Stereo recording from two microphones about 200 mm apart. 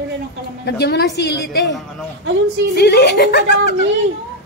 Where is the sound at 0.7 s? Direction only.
55° left (ahead or behind).